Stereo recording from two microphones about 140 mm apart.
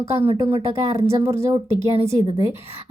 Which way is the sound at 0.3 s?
40° right (ahead or behind).